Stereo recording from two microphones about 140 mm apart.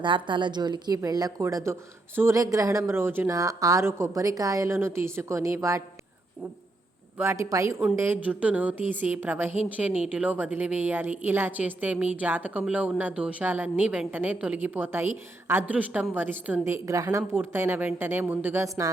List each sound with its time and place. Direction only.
0.0 s a woman's voice: 35° right (ahead or behind)
7.2 s a woman's voice: 20° right (ahead or behind)